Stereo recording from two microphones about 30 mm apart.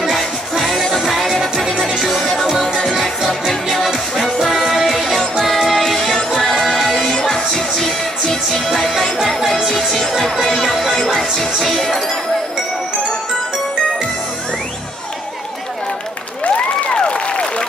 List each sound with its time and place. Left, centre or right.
0.6 s music: centre
2.5 s music: left
4.7 s music: centre
5.9 s music: left
16.4 s applause: left
16.9 s applause: left